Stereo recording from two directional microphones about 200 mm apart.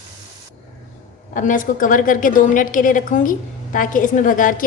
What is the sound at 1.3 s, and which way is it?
A woman's voice, 40° left (ahead or behind).